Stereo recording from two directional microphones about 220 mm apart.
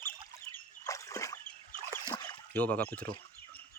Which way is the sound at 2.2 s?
10° left (ahead or behind).